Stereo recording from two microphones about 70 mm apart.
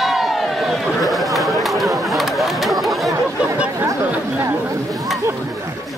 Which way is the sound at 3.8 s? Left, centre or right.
Right.